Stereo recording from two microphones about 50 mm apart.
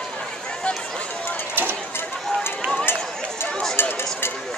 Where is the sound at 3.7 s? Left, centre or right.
Left.